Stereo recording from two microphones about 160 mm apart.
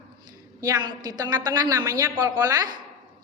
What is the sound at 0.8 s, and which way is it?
A woman's voice, 25° right (ahead or behind).